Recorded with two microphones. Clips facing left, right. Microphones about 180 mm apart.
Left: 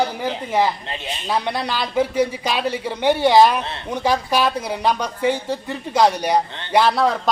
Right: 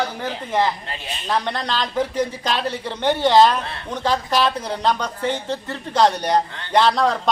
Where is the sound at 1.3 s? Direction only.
10° left (ahead or behind).